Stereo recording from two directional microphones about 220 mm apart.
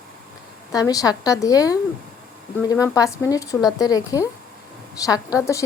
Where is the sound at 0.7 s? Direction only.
15° left (ahead or behind).